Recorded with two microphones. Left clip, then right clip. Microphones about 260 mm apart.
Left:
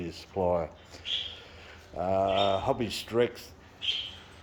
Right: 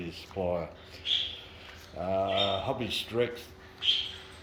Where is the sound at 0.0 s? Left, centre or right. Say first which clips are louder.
Left 4 dB; centre.